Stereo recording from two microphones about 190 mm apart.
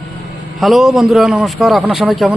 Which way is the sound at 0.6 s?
Centre (ahead or behind).